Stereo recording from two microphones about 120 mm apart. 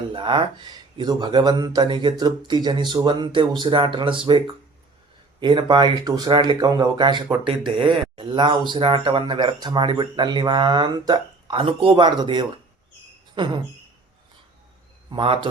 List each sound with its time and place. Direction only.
0.1 s speech: 45° right (ahead or behind)
11.6 s speech: 50° right (ahead or behind)
13.3 s a sound: 40° right (ahead or behind)
15.1 s a man's voice: 45° right (ahead or behind)